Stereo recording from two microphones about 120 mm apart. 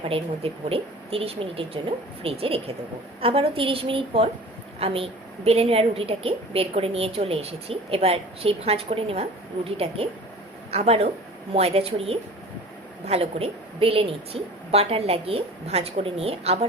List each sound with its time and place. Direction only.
0.7 s a woman's voice: 50° right (ahead or behind)